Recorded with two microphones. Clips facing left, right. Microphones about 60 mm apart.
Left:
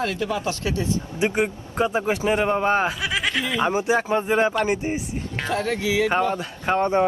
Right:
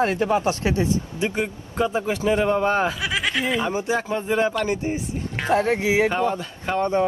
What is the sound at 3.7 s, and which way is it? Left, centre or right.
Speech, left.